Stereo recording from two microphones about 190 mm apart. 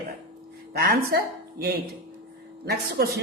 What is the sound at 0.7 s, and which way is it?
Speech, 55° right (ahead or behind).